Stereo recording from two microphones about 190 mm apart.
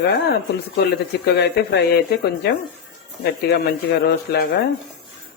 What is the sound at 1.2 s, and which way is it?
Speech, 60° left (ahead or behind).